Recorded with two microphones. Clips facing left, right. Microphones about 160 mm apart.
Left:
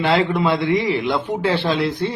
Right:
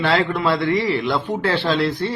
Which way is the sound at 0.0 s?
20° left (ahead or behind).